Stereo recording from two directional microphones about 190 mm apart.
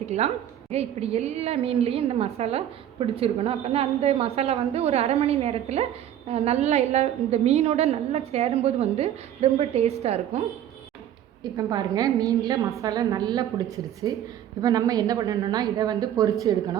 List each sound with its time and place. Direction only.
0.1 s a woman's voice: 35° right (ahead or behind)
11.5 s speech: 20° right (ahead or behind)